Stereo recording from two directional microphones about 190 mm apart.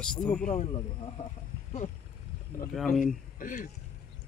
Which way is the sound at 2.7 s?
Centre (ahead or behind).